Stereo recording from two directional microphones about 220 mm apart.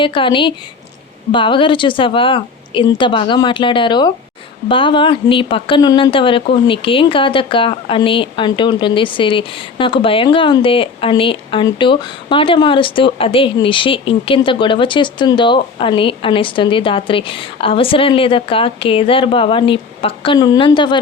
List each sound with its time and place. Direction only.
0.0 s speech: 25° left (ahead or behind)